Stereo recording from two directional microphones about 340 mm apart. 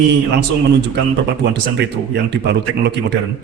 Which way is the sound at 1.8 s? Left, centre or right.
Right.